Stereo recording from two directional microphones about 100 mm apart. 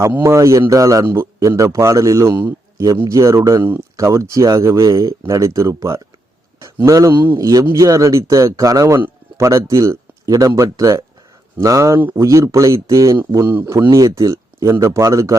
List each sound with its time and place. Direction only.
0.2 s speech: 30° right (ahead or behind)
6.6 s a sound: 30° right (ahead or behind)
7.3 s speech: 35° right (ahead or behind)
11.9 s speech: 20° right (ahead or behind)
12.2 s speech: 30° right (ahead or behind)
13.3 s speech: 20° right (ahead or behind)